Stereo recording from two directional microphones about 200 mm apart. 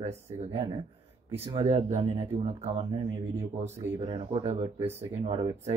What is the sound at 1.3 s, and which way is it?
Speech, 30° right (ahead or behind).